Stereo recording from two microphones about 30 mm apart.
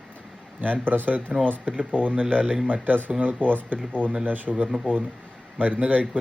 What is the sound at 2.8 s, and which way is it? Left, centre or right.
Speech, right.